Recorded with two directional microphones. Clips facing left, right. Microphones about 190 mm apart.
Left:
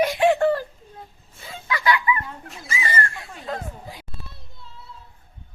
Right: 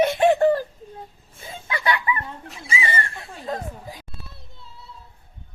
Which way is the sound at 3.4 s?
20° right (ahead or behind).